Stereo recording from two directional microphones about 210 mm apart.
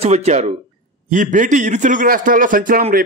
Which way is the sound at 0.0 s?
30° right (ahead or behind).